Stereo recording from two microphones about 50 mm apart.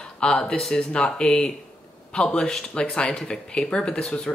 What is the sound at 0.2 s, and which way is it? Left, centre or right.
Speech, centre.